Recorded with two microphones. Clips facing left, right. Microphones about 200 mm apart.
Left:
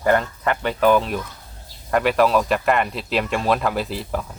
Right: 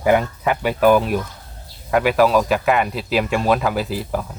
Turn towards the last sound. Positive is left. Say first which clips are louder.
# right 2 dB
turn(degrees=-5)  # may be behind; listen again after turning